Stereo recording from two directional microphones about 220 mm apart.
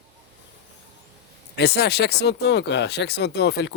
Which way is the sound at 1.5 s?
50° left (ahead or behind).